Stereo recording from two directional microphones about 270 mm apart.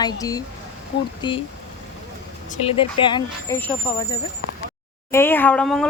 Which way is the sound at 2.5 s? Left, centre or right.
Left.